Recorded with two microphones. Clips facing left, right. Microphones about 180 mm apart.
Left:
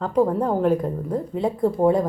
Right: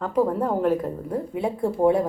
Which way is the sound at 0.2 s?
25° left (ahead or behind).